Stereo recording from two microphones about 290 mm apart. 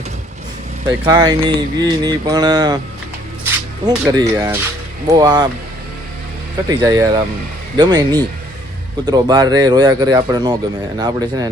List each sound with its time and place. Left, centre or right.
0.9 s speech: centre
3.8 s speech: centre
6.7 s speech: centre